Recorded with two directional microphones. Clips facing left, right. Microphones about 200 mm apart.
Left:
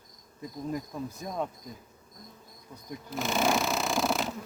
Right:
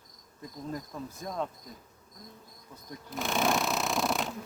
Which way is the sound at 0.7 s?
15° left (ahead or behind).